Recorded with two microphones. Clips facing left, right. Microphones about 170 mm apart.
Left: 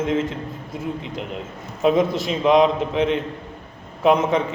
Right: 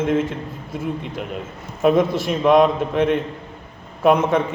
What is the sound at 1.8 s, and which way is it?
A man's voice, 55° right (ahead or behind).